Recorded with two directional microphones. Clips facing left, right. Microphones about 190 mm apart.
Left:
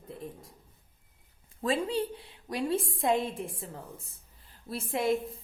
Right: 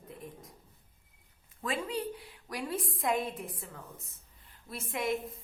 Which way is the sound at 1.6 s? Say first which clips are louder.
Left 5 dB; 30° left (ahead or behind).